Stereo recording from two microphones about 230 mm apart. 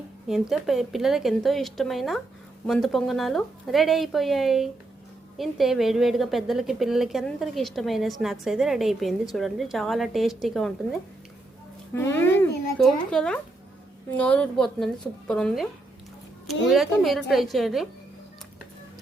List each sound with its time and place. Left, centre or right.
0.3 s a woman's voice: centre
11.9 s a woman's voice: centre
16.6 s a woman's voice: centre